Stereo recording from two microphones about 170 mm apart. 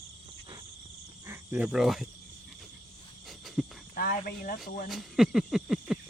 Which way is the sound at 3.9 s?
55° left (ahead or behind).